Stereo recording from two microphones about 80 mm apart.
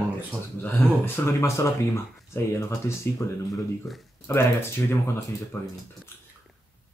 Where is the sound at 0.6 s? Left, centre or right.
Left.